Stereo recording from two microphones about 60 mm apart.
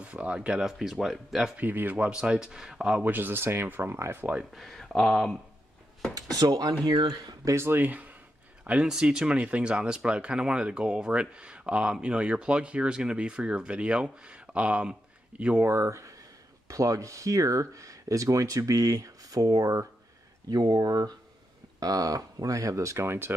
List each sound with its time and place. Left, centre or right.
0.0 s speech: centre
1.6 s speech: right
2.0 s speech: centre
3.0 s speech: right
4.6 s speech: centre
6.3 s speech: right
7.4 s speech: right
7.8 s speech: right
8.6 s speech: centre
15.7 s speech: right
20.4 s speech: right